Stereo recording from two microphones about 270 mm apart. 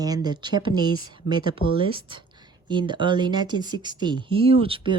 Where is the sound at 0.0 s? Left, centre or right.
Centre.